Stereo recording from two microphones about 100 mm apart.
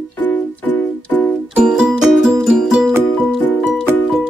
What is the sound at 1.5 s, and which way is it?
Music, 10° right (ahead or behind).